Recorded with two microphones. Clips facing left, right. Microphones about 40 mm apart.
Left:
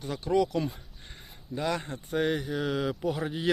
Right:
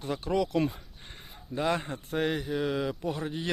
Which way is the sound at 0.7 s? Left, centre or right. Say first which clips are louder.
Right 1 dB; centre.